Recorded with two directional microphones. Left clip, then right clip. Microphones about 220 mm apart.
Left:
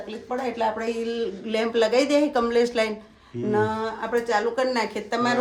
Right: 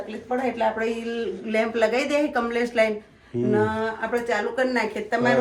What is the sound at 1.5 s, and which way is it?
Speech, 25° left (ahead or behind).